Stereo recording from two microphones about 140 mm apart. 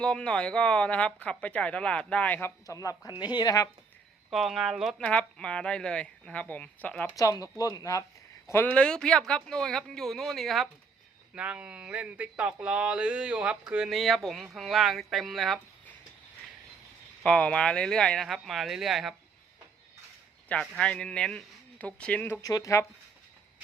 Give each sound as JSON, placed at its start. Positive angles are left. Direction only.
{"t": 0.0, "sound": "speech", "side_deg": 5}
{"t": 2.6, "sound": "speech", "side_deg": 25}
{"t": 4.3, "sound": "speech", "side_deg": 0}
{"t": 7.2, "sound": "speech", "side_deg": 25}
{"t": 8.4, "sound": "speech", "side_deg": 15}
{"t": 17.2, "sound": "speech", "side_deg": 10}
{"t": 20.5, "sound": "speech", "side_deg": 5}
{"t": 22.4, "sound": "speech", "side_deg": 25}